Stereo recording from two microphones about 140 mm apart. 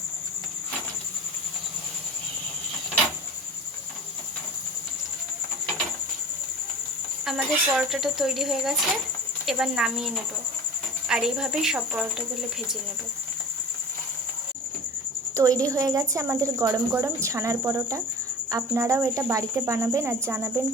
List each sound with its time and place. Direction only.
7.3 s speech: 5° right (ahead or behind)
11.1 s speech: 5° right (ahead or behind)
15.4 s speech: 25° right (ahead or behind)